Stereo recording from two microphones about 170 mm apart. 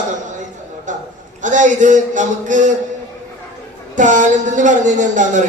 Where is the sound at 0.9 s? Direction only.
50° right (ahead or behind).